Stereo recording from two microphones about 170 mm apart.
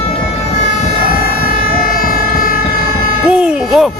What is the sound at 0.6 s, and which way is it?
Siren, 50° left (ahead or behind).